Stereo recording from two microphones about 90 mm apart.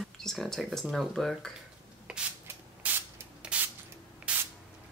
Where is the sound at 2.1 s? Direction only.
10° right (ahead or behind).